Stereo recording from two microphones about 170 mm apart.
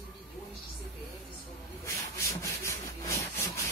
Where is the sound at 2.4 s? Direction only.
15° left (ahead or behind).